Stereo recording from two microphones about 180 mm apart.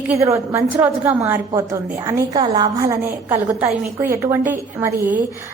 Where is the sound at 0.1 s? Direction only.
15° right (ahead or behind).